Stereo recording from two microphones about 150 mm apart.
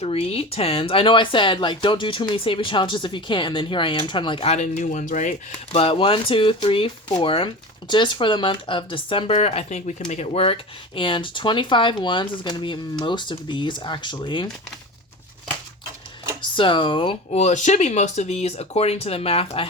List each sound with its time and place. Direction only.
0.0 s speech: 40° left (ahead or behind)
4.6 s speech: 55° left (ahead or behind); by 14.5 s 35° left (ahead or behind)
16.4 s speech: 35° left (ahead or behind)
17.4 s speech: 55° left (ahead or behind)